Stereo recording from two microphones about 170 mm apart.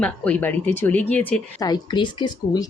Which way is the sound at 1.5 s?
25° left (ahead or behind).